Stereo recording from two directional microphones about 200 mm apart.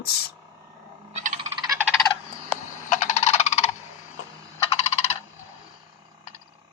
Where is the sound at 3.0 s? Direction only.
35° left (ahead or behind).